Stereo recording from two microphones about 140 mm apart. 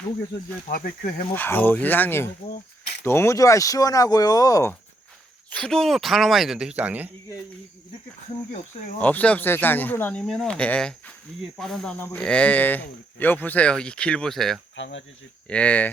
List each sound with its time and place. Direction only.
0.7 s speech: 90° left
1.3 s speech: 15° left (ahead or behind)
5.5 s speech: 5° left (ahead or behind); by 7.1 s 10° right (ahead or behind)
9.0 s speech: 10° left (ahead or behind)